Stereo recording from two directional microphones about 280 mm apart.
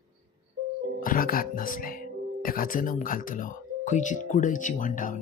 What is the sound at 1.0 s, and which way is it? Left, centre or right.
Speech, left.